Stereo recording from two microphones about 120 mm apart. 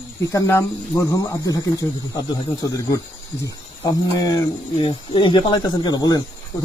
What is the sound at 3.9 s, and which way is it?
Speech, 30° left (ahead or behind).